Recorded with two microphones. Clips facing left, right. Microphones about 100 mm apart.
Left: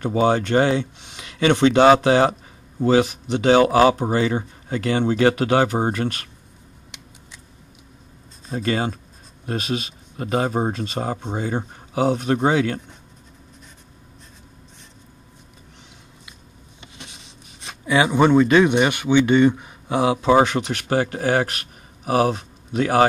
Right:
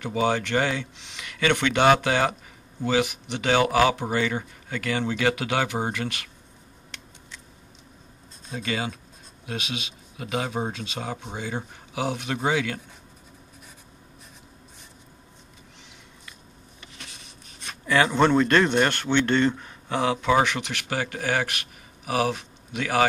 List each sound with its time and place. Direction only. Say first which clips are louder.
0.0 s speech: left 5 dB; 35° left (ahead or behind)
8.5 s speech: left 6 dB; 40° left (ahead or behind)
16.8 s a sound: left 3 dB; 25° left (ahead or behind)
17.8 s speech: left 3 dB; 10° left (ahead or behind); by 23.0 s 35° left (ahead or behind)